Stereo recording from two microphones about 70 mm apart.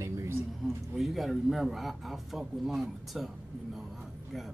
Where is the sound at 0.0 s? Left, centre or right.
Right.